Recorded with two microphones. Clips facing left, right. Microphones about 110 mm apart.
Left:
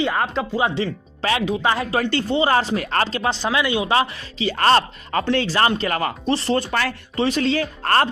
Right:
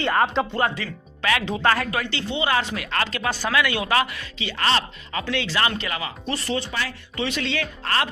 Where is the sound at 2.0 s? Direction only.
40° left (ahead or behind).